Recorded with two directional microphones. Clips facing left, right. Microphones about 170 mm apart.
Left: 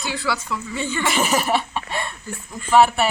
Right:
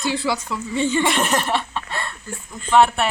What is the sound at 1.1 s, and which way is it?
Speech, 5° left (ahead or behind).